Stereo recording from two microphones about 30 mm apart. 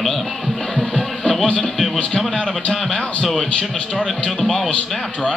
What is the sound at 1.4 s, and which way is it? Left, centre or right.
Speech, left.